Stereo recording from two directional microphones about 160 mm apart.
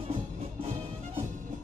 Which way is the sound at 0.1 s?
40° right (ahead or behind).